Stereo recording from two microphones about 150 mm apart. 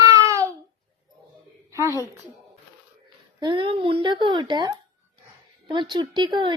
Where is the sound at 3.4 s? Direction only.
35° right (ahead or behind).